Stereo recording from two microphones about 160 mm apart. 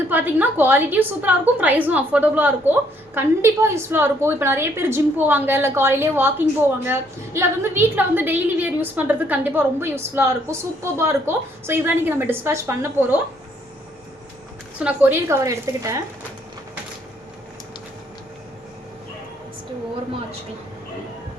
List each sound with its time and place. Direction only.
0.1 s a woman's voice: 10° right (ahead or behind)
14.8 s a woman's voice: 10° right (ahead or behind)